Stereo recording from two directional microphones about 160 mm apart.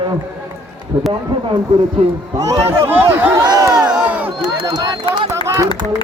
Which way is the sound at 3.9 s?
5° right (ahead or behind).